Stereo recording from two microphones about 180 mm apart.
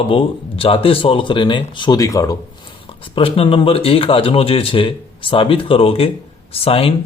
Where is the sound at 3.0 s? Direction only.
30° left (ahead or behind).